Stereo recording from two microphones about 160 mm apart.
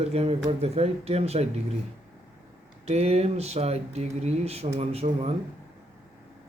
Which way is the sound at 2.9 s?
40° right (ahead or behind).